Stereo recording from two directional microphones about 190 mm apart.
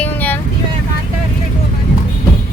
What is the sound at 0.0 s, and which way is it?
Vehicle, 10° left (ahead or behind).